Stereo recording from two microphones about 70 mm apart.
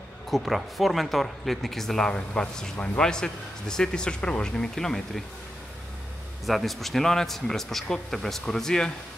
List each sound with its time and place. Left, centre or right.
0.3 s a man's voice: centre
6.4 s speech: centre